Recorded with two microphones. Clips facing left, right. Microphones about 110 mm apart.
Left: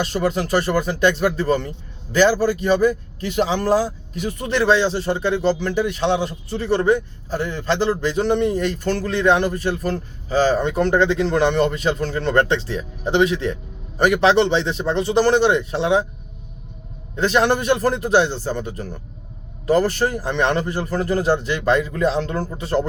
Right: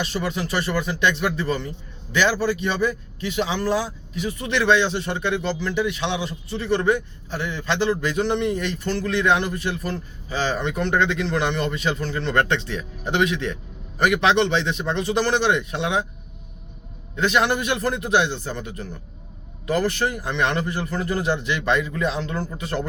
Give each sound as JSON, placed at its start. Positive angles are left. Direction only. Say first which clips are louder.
{"t": 0.0, "sound": "speech", "louder": "left 5 dB", "side_deg": 40}
{"t": 17.2, "sound": "speech", "louder": "left 3 dB", "side_deg": 35}